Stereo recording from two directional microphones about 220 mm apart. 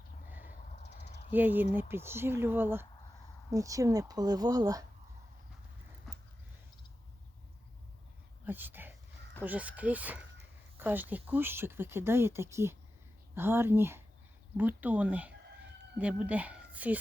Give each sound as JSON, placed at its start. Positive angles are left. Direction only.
{"t": 1.3, "sound": "speech", "side_deg": -10}
{"t": 8.4, "sound": "a sound", "side_deg": -10}
{"t": 9.4, "sound": "speech", "side_deg": -5}